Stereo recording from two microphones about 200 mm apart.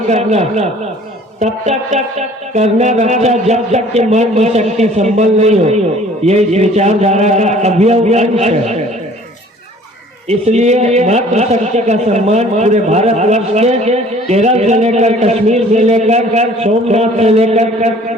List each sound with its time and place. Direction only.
0.1 s a man's voice: 35° right (ahead or behind)
10.2 s a man's voice: 35° right (ahead or behind)